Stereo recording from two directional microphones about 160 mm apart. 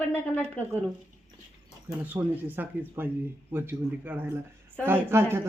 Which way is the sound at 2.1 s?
10° right (ahead or behind).